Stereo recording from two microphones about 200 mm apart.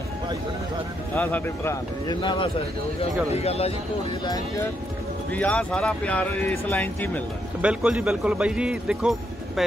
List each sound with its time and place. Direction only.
1.1 s speech: 10° left (ahead or behind); by 3.7 s 30° left (ahead or behind)
5.3 s a man's voice: 5° left (ahead or behind)
7.6 s a man's voice: 5° right (ahead or behind)